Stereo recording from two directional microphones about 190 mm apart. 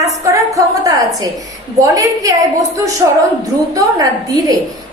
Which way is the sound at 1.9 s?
15° right (ahead or behind).